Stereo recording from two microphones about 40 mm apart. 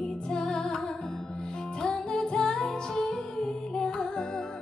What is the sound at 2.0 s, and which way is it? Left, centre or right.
Music, centre.